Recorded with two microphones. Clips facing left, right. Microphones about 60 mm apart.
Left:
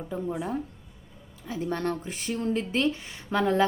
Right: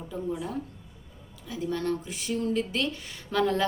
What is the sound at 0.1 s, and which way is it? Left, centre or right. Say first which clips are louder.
A woman's voice: left 2 dB; left.